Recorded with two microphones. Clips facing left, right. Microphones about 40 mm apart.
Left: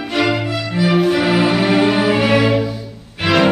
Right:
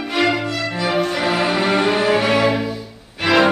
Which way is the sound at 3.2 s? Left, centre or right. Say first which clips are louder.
Even; centre.